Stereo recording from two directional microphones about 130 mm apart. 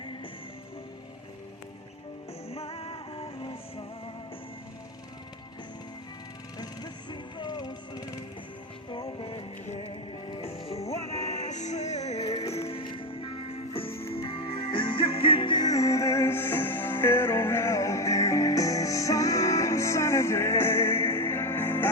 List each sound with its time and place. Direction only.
2.5 s music: 50° left (ahead or behind)
6.6 s music: 35° left (ahead or behind)
9.1 s music: 40° left (ahead or behind)
11.3 s music: 60° left (ahead or behind); by 21.8 s 15° left (ahead or behind)